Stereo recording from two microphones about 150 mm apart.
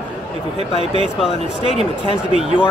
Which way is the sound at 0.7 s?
40° left (ahead or behind).